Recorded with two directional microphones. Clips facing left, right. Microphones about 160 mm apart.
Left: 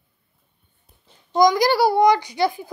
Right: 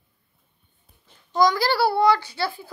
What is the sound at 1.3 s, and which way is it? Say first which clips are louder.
A child's voice: left 4 dB; 15° left (ahead or behind).